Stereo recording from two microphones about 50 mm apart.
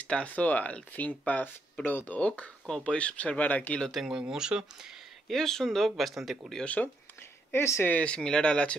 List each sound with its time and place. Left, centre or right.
0.0 s speech: left
2.1 s speech: left
4.0 s speech: centre
5.3 s speech: centre
6.6 s speech: left
7.2 s a sound: left
8.0 s speech: centre